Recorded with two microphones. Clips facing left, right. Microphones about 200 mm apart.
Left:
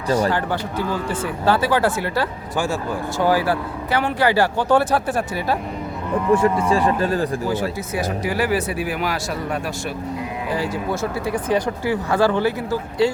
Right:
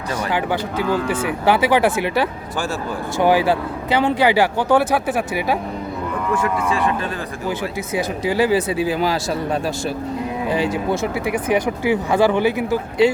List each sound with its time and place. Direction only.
0.3 s speech: 15° right (ahead or behind)
1.0 s speech: 75° right (ahead or behind)
1.5 s speech: 15° right (ahead or behind)
6.3 s speech: 35° left (ahead or behind)
7.9 s speech: 25° right (ahead or behind)
10.5 s speech: 20° right (ahead or behind)